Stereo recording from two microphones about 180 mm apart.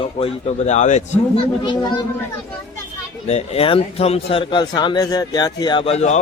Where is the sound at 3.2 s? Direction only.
35° left (ahead or behind).